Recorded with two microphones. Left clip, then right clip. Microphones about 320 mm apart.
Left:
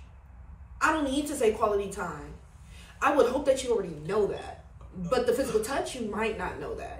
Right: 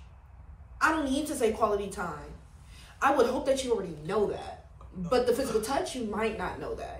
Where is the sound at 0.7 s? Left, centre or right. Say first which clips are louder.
Left 1 dB; centre.